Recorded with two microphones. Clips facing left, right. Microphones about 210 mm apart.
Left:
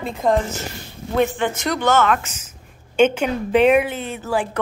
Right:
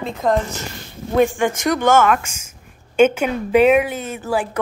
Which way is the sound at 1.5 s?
50° right (ahead or behind).